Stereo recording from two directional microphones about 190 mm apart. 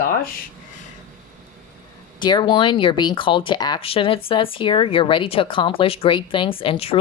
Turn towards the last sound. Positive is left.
turn(degrees=30)  # may be behind; listen again after turning